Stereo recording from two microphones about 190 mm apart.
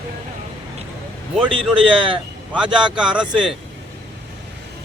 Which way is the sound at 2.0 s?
25° right (ahead or behind).